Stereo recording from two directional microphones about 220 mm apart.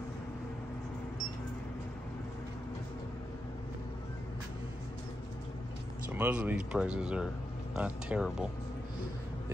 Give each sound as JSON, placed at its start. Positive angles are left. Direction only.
{"t": 6.1, "sound": "speech", "side_deg": -5}